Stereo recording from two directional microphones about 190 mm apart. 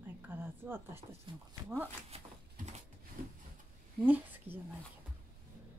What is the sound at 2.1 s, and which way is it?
Dog, 35° right (ahead or behind).